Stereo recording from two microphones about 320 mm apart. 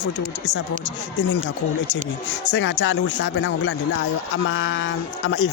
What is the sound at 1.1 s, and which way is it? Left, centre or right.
Speech, left.